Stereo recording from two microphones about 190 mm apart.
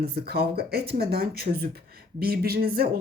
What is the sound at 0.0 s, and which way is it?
Speech, 55° right (ahead or behind).